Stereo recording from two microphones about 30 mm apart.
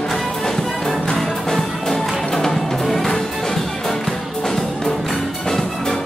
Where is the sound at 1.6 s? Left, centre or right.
Centre.